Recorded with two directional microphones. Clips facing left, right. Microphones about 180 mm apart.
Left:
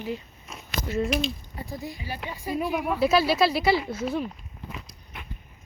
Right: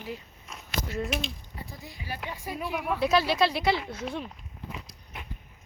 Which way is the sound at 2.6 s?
25° left (ahead or behind).